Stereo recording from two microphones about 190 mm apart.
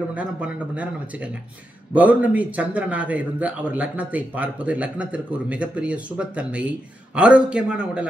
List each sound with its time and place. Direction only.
0.1 s a man's voice: 5° right (ahead or behind)